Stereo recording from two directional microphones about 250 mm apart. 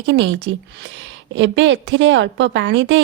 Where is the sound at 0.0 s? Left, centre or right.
Right.